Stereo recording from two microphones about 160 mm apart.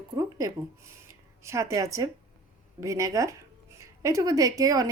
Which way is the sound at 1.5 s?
20° right (ahead or behind).